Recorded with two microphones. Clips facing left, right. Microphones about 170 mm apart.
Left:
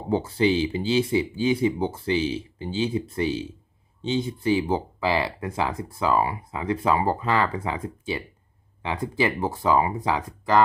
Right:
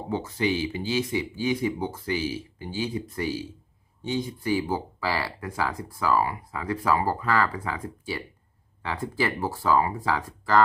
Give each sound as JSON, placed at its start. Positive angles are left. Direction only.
{"t": 0.1, "sound": "speech", "side_deg": 30}